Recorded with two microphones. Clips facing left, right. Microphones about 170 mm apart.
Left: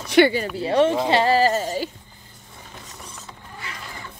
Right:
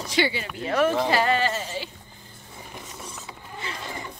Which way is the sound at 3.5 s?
25° right (ahead or behind).